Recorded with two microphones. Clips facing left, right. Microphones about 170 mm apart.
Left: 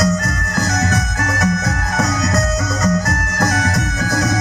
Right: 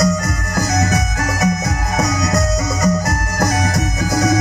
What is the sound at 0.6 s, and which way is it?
Music, 15° right (ahead or behind).